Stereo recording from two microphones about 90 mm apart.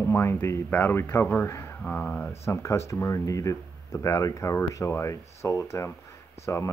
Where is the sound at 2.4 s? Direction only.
30° left (ahead or behind).